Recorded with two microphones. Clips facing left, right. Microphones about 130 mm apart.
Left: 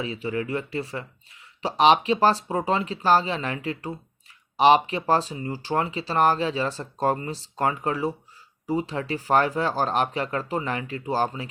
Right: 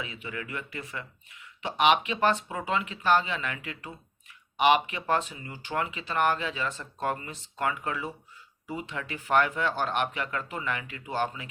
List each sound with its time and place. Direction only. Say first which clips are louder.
0.0 s speech: left 9 dB; 35° left (ahead or behind)